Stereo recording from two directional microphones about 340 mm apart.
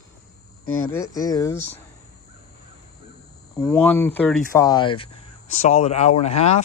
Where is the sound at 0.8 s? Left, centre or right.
Centre.